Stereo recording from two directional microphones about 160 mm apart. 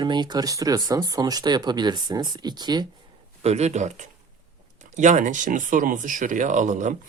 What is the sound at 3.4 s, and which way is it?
Speech, 45° right (ahead or behind).